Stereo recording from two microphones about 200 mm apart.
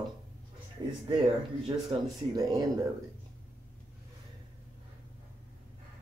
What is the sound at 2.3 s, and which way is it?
Speech, 20° right (ahead or behind).